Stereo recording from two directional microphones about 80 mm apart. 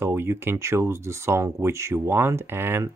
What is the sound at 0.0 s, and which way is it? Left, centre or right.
Speech, right.